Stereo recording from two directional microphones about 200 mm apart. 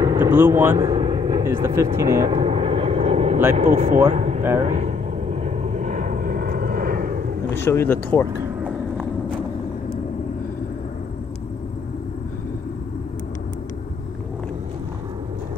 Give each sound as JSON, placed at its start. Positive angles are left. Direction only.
{"t": 0.0, "sound": "vehicle", "side_deg": -15}
{"t": 3.5, "sound": "speech", "side_deg": -30}
{"t": 4.4, "sound": "speech", "side_deg": -15}
{"t": 4.6, "sound": "vehicle", "side_deg": -35}
{"t": 7.5, "sound": "speech", "side_deg": 10}
{"t": 8.4, "sound": "a sound", "side_deg": -5}